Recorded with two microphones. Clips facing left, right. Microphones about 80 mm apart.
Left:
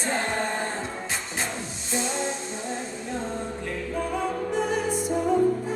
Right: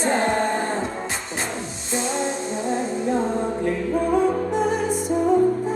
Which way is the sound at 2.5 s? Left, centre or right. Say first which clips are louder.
Right 8 dB; right.